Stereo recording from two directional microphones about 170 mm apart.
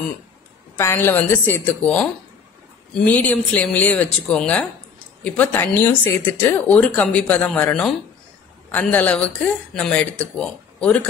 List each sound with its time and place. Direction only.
0.7 s a woman's voice: 15° left (ahead or behind)